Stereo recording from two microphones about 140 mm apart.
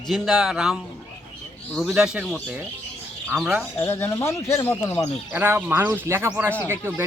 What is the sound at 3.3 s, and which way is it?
Speech, 10° right (ahead or behind).